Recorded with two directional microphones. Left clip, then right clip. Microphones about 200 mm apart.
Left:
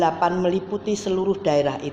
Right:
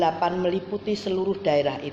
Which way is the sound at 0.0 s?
30° left (ahead or behind).